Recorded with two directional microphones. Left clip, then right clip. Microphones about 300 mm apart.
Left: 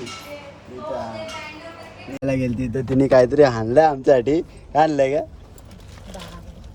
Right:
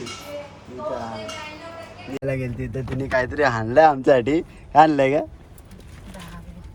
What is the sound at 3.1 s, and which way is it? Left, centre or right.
A man's voice, centre.